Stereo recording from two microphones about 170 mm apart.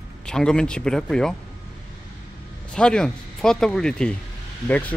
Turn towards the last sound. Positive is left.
turn(degrees=10)  # may be behind; listen again after turning